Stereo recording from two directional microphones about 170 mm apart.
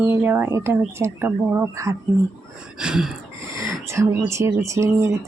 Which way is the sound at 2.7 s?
5° right (ahead or behind).